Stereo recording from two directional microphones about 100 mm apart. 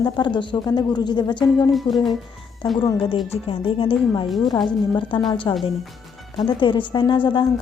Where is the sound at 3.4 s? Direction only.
65° left (ahead or behind).